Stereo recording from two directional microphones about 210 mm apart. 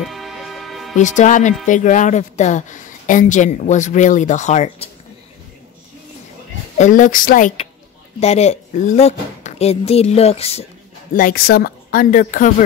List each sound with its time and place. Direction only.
0.0 s music: centre (ahead or behind)
0.9 s speech: 35° left (ahead or behind)
6.8 s speech: 40° left (ahead or behind)
11.1 s speech: 45° left (ahead or behind)